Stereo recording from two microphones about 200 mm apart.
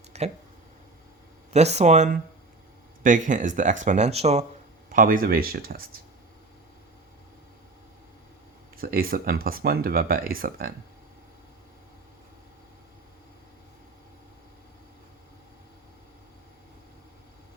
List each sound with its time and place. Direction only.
0.1 s a sound: 30° right (ahead or behind)
1.5 s speech: 35° right (ahead or behind)
4.9 s speech: 45° right (ahead or behind)
8.8 s speech: 45° right (ahead or behind)